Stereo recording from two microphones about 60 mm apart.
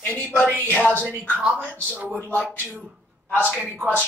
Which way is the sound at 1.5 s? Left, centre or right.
Left.